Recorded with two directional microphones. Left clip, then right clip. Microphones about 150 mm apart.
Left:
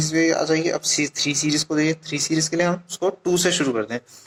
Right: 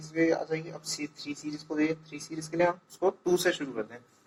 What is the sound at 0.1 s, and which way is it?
Speech, 45° left (ahead or behind).